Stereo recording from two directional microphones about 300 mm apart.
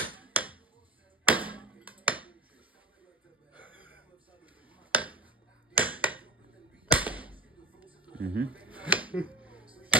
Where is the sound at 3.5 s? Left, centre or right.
Centre.